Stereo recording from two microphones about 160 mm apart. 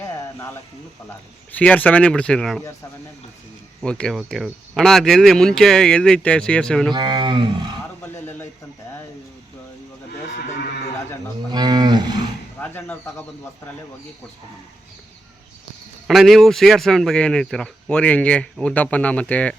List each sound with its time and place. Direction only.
0.0 s a sound: 20° left (ahead or behind)
1.5 s speech: 10° left (ahead or behind)
3.8 s speech: 5° left (ahead or behind)
6.9 s speech: 30° right (ahead or behind)
8.0 s a sound: 15° left (ahead or behind)
11.5 s cattle: 25° right (ahead or behind)
12.5 s speech: 10° left (ahead or behind)
16.0 s speech: centre (ahead or behind)